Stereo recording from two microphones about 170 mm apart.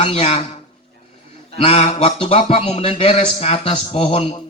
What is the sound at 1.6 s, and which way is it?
A man's voice, 35° left (ahead or behind).